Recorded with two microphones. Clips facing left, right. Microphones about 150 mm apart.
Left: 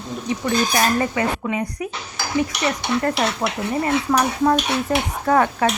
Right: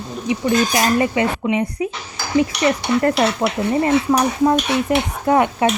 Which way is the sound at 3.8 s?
15° right (ahead or behind).